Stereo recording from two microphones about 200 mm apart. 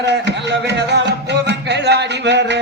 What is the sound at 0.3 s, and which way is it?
Music, 60° right (ahead or behind).